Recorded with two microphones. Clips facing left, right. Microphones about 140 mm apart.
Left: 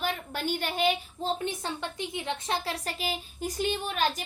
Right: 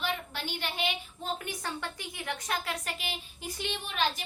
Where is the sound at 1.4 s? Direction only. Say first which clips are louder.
Left 4 dB; 25° left (ahead or behind).